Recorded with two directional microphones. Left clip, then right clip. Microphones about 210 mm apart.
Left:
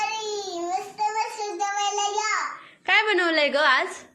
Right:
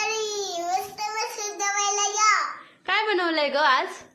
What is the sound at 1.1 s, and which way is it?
Child singing, 20° right (ahead or behind).